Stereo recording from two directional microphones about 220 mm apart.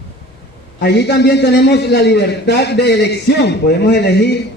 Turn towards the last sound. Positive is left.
turn(degrees=50)  # may be behind; listen again after turning